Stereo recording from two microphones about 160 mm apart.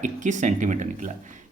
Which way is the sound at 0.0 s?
50° right (ahead or behind).